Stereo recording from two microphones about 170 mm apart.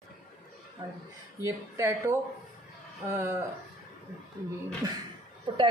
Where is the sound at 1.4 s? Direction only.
15° right (ahead or behind).